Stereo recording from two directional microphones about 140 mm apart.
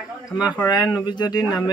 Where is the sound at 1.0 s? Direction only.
30° left (ahead or behind).